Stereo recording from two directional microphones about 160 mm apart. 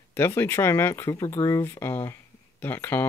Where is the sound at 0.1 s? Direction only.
15° left (ahead or behind).